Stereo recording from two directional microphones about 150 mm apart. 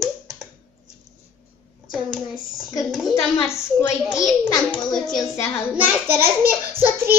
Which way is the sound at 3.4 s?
20° left (ahead or behind).